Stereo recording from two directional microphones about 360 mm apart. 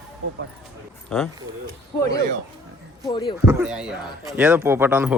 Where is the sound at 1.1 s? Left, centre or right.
Centre.